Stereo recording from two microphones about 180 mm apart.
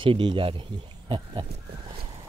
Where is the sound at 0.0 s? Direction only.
25° right (ahead or behind).